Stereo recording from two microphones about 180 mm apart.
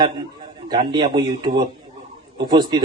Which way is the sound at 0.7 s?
25° right (ahead or behind).